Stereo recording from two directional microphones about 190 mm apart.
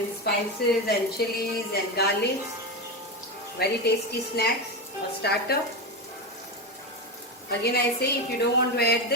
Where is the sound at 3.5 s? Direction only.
55° left (ahead or behind).